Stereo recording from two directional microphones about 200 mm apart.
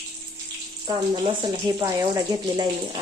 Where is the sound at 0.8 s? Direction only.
25° right (ahead or behind).